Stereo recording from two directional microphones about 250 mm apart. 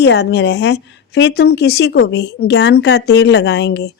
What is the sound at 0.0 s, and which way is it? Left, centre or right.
A woman's voice, left.